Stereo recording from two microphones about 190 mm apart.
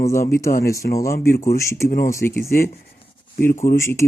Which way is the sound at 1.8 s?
50° left (ahead or behind).